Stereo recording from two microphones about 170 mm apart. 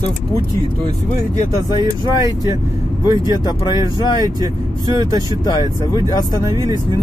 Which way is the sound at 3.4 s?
25° left (ahead or behind).